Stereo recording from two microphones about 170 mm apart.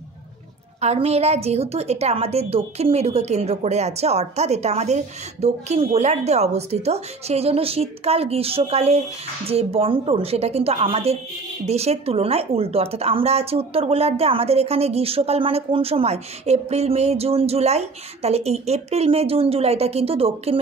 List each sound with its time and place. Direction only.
0.7 s speech: 40° right (ahead or behind)